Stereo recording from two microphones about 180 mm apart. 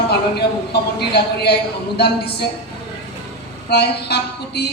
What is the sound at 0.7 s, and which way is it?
A woman's voice, 65° left (ahead or behind).